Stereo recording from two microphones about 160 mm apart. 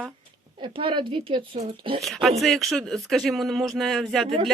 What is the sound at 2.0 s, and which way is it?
Speech, centre (ahead or behind).